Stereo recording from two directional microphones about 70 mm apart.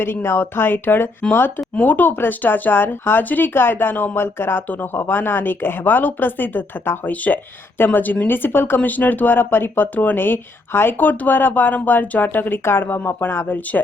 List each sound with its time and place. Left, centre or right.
0.0 s speech: left